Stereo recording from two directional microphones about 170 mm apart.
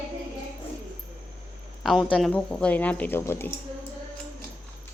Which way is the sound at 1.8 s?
Centre (ahead or behind).